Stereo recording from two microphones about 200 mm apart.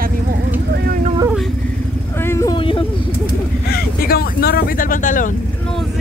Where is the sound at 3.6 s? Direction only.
50° left (ahead or behind).